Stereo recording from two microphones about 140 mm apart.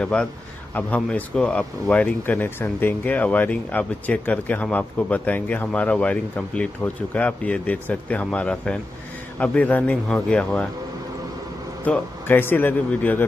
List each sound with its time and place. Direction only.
0.0 s speech: 5° left (ahead or behind)
11.8 s speech: 10° left (ahead or behind)